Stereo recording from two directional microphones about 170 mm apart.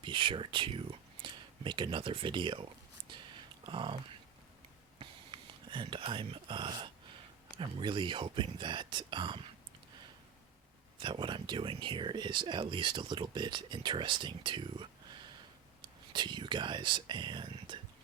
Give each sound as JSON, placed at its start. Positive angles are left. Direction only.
{"t": 0.0, "sound": "speech", "side_deg": -30}
{"t": 3.7, "sound": "speech", "side_deg": -30}
{"t": 4.9, "sound": "a sound", "side_deg": -30}
{"t": 7.6, "sound": "speech", "side_deg": -30}
{"t": 11.0, "sound": "speech", "side_deg": -30}
{"t": 16.1, "sound": "speech", "side_deg": -25}